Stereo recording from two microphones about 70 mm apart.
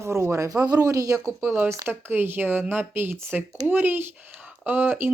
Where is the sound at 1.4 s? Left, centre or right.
Right.